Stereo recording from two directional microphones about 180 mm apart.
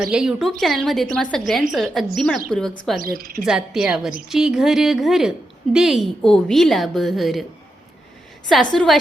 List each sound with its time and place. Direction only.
0.0 s a woman's voice: 5° right (ahead or behind)
3.0 s a woman's voice: 55° right (ahead or behind)
3.4 s a woman's voice: 5° right (ahead or behind)
8.7 s a woman's voice: centre (ahead or behind)